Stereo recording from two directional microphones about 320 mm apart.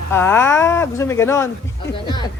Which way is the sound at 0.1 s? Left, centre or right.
Centre.